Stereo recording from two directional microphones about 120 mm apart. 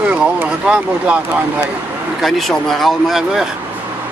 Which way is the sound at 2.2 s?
Centre (ahead or behind).